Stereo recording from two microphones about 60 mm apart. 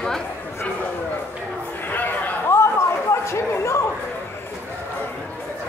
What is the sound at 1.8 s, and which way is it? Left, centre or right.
Chatter, left.